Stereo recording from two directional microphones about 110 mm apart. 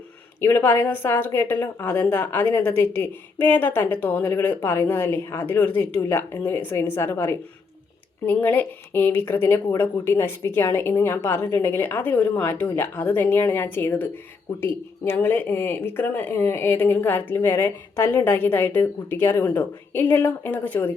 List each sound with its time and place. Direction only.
0.4 s a woman's voice: 20° left (ahead or behind)